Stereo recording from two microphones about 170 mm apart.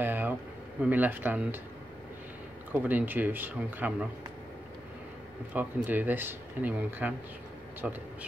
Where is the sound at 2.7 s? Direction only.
10° right (ahead or behind).